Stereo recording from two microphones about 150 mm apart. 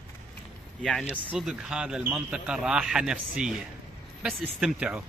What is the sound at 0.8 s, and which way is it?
A man's voice, 5° left (ahead or behind).